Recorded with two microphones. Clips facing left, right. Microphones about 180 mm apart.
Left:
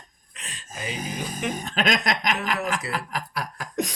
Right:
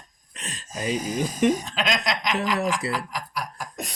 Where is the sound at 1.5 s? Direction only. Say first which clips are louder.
Left 1 dB; 55° left (ahead or behind).